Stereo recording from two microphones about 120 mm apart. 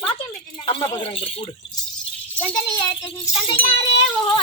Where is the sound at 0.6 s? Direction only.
40° left (ahead or behind).